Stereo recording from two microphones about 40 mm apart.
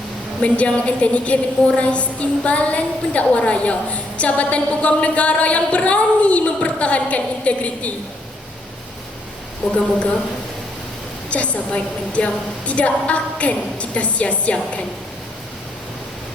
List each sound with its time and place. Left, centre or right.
0.4 s a woman's voice: left
9.6 s a woman's voice: centre
11.3 s a woman's voice: left